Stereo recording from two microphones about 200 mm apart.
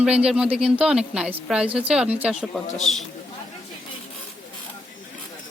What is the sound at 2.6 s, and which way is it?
Speech, 35° left (ahead or behind).